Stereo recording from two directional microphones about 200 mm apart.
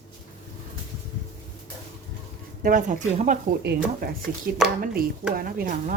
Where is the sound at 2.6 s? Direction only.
40° right (ahead or behind).